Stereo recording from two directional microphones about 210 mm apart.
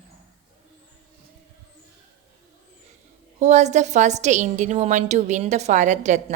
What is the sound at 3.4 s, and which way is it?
A woman's voice, 35° right (ahead or behind).